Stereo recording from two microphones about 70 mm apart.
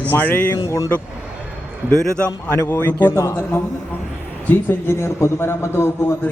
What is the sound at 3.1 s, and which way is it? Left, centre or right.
Speech, left.